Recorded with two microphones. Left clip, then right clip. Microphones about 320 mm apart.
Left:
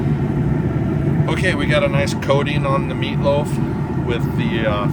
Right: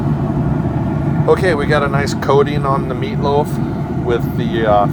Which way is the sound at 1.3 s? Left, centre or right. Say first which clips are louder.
Right 7 dB; centre.